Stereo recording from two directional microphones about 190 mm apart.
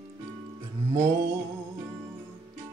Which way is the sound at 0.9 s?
15° right (ahead or behind).